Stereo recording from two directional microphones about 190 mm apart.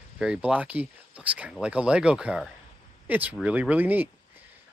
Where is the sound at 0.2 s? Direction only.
5° right (ahead or behind).